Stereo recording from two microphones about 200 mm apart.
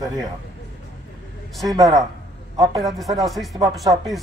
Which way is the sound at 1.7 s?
15° right (ahead or behind).